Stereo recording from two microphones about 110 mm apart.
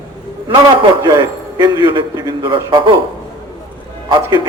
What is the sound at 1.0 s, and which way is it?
A man's voice, 40° right (ahead or behind).